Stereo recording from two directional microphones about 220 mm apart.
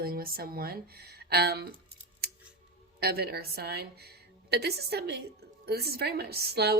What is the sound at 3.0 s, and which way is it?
Speech, 45° right (ahead or behind).